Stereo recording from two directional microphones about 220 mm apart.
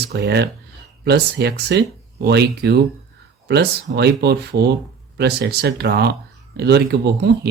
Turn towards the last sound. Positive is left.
turn(degrees=-45)  # may be behind; listen again after turning